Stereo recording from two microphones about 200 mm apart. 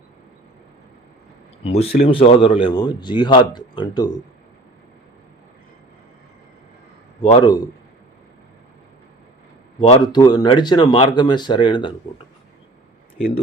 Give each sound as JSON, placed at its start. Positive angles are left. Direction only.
{"t": 1.6, "sound": "a man's voice", "side_deg": 30}
{"t": 7.2, "sound": "a man's voice", "side_deg": 25}
{"t": 9.9, "sound": "a man's voice", "side_deg": 20}